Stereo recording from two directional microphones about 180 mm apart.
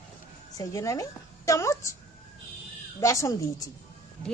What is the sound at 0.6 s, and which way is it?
A woman's voice, 20° left (ahead or behind).